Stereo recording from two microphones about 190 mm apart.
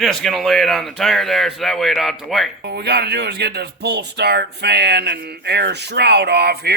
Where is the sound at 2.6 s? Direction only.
60° right (ahead or behind).